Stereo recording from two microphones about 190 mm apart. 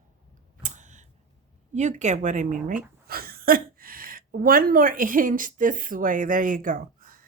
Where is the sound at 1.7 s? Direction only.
40° right (ahead or behind).